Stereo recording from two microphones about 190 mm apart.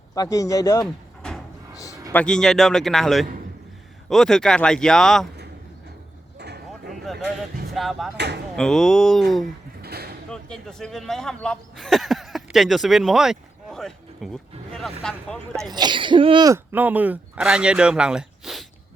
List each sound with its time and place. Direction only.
0.1 s speech: 20° left (ahead or behind)
1.7 s a sound: 15° left (ahead or behind)
2.1 s speech: 5° left (ahead or behind)
6.4 s vehicle: 60° right (ahead or behind)
6.9 s a sound: centre (ahead or behind)
7.7 s speech: centre (ahead or behind)
8.1 s speech: 60° right (ahead or behind)
8.5 s speech: centre (ahead or behind)
9.8 s a sound: 55° right (ahead or behind)
10.2 s speech: 5° left (ahead or behind)
15.7 s speech: 25° right (ahead or behind)
16.7 s speech: 10° right (ahead or behind)